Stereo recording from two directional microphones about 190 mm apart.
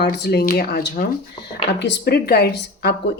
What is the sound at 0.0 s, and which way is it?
Speech, 55° left (ahead or behind).